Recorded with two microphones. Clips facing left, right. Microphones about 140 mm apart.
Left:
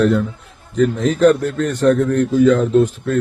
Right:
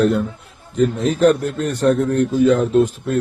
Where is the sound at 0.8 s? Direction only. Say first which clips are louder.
Left 2 dB; 35° right (ahead or behind).